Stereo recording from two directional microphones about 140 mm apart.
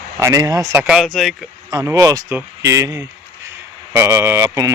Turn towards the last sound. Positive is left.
turn(degrees=-20)  # may be behind; listen again after turning